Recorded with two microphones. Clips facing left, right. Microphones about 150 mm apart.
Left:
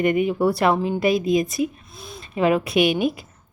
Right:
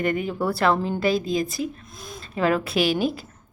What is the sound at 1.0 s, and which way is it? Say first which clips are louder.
Speech: left 3 dB; 20° left (ahead or behind).